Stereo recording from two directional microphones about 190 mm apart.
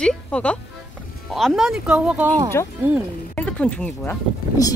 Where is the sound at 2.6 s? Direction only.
15° left (ahead or behind).